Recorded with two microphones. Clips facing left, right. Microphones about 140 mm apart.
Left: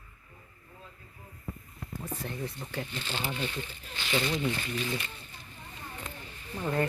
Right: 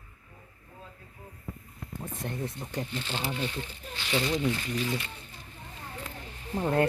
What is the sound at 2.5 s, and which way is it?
Speech, 20° right (ahead or behind).